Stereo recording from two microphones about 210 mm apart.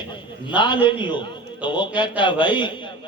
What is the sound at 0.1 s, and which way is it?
A man's voice, 20° left (ahead or behind).